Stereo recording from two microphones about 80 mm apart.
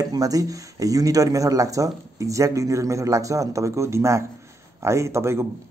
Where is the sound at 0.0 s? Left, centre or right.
Right.